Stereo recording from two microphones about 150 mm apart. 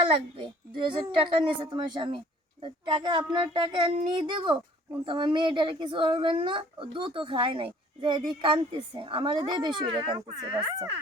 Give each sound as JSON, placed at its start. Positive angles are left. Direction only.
{"t": 0.8, "sound": "speech", "side_deg": -35}